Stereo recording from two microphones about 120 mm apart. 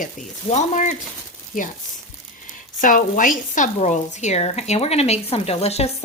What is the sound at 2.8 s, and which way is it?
Speech, 90° left.